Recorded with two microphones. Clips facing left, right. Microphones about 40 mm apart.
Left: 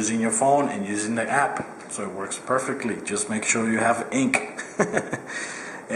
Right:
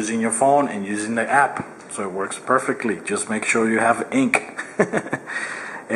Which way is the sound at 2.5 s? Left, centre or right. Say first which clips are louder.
Right 5 dB; centre.